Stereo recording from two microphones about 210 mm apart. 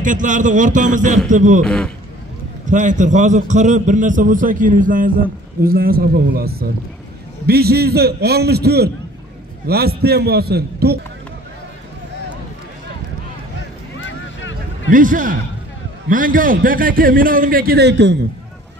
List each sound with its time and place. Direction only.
0.0 s a man's voice: 40° right (ahead or behind)
1.6 s a man's voice: 5° left (ahead or behind)
2.6 s a man's voice: 35° right (ahead or behind)
13.9 s vehicle: 60° left (ahead or behind)
14.9 s a man's voice: 40° right (ahead or behind); by 18.1 s 55° right (ahead or behind)